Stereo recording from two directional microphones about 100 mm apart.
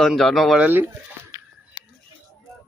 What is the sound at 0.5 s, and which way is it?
Speech, 15° right (ahead or behind).